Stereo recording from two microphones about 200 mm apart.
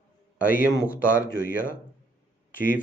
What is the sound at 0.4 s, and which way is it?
Speech, 10° right (ahead or behind).